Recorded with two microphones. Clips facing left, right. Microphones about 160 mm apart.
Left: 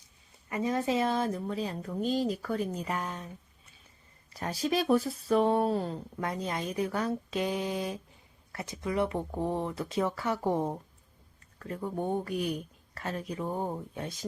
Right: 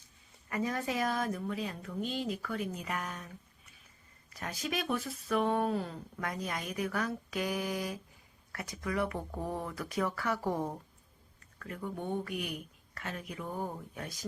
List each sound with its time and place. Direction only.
0.5 s speech: 25° left (ahead or behind)
4.4 s speech: 35° left (ahead or behind)
11.6 s speech: 35° left (ahead or behind)